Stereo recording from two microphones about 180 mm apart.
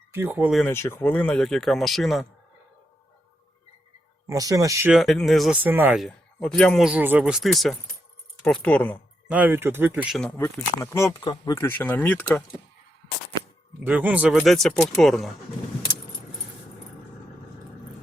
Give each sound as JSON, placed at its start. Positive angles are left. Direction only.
{"t": 0.1, "sound": "speech", "side_deg": -10}
{"t": 0.5, "sound": "speech", "side_deg": 10}
{"t": 4.3, "sound": "speech", "side_deg": -20}
{"t": 4.9, "sound": "speech", "side_deg": 0}
{"t": 6.1, "sound": "speech", "side_deg": 5}
{"t": 9.3, "sound": "speech", "side_deg": -10}
{"t": 10.2, "sound": "speech", "side_deg": 5}
{"t": 10.4, "sound": "speech", "side_deg": 15}
{"t": 13.8, "sound": "speech", "side_deg": -10}